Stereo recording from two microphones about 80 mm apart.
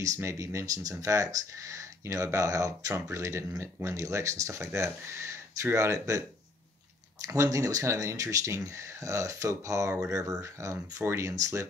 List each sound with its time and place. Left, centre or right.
0.0 s speech: right
7.2 s speech: right